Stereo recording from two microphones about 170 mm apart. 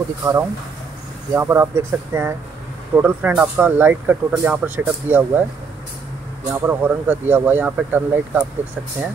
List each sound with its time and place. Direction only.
0.2 s speech: 15° right (ahead or behind)
6.5 s speech: 10° right (ahead or behind)